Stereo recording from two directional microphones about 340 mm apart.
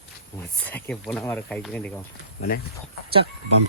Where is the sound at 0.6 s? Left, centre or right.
Centre.